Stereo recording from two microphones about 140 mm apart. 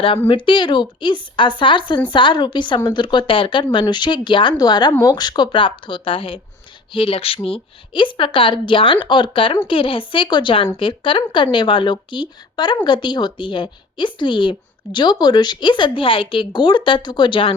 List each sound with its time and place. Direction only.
0.3 s speech: 35° left (ahead or behind)